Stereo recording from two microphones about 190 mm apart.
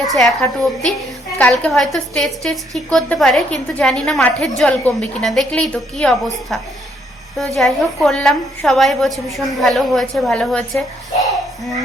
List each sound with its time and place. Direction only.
0.0 s a woman's voice: centre (ahead or behind)